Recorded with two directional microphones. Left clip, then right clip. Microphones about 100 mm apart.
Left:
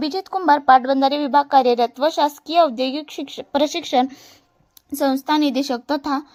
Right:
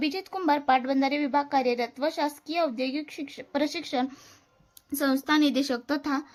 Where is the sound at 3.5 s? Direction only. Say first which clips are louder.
Left 9 dB; 75° left (ahead or behind).